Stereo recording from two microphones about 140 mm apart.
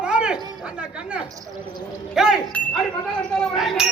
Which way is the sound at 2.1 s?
5° right (ahead or behind).